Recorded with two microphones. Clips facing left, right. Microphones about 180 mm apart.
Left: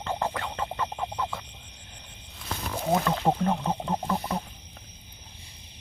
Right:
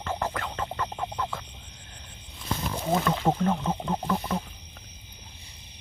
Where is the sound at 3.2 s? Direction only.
15° left (ahead or behind).